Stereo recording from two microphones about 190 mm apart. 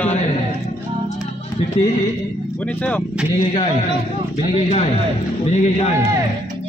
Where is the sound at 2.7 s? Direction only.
10° left (ahead or behind).